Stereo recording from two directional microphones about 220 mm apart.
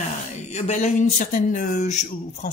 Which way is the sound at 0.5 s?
30° left (ahead or behind).